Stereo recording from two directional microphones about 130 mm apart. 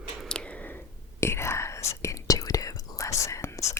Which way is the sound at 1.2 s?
20° left (ahead or behind).